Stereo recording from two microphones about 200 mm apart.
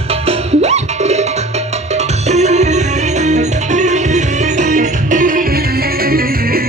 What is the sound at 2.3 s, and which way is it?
Music, 35° right (ahead or behind).